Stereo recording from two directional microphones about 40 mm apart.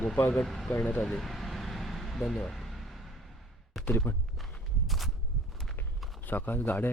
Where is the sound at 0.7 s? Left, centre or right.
Left.